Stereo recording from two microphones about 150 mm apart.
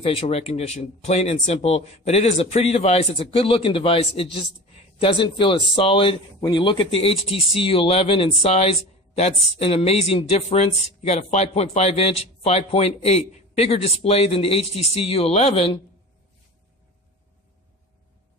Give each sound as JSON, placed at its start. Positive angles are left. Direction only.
{"t": 0.0, "sound": "speech", "side_deg": 40}